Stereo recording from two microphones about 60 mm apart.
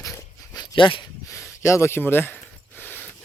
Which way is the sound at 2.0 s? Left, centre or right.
Left.